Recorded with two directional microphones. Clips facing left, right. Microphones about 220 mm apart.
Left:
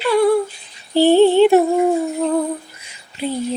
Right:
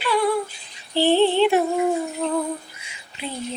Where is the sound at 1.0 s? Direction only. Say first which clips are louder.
Left 6 dB; 45° left (ahead or behind).